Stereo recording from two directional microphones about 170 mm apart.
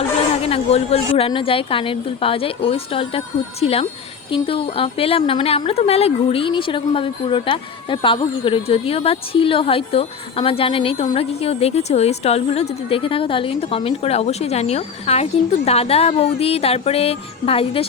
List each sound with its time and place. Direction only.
0.4 s a woman's voice: 35° left (ahead or behind)